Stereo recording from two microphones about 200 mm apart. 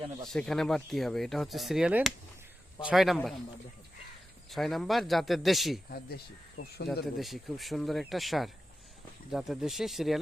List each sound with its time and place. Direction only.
0.3 s speech: centre (ahead or behind)
4.4 s speech: centre (ahead or behind)
5.9 s speech: 50° left (ahead or behind)
6.8 s speech: centre (ahead or behind)